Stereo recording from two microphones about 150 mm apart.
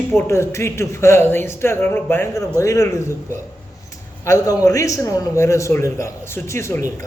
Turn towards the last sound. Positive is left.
turn(degrees=20)  # may be behind; listen again after turning